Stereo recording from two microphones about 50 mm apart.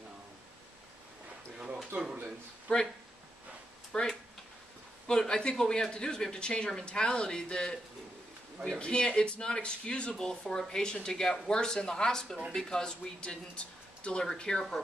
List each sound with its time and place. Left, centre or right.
2.7 s speech: left
3.9 s speech: centre
8.7 s speech: left